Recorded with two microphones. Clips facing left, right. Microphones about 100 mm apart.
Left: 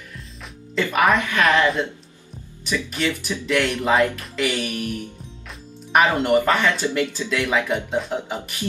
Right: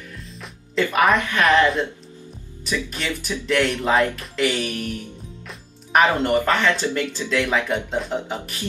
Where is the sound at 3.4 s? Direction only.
Centre (ahead or behind).